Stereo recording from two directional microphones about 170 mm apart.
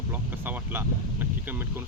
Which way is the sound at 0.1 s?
10° right (ahead or behind).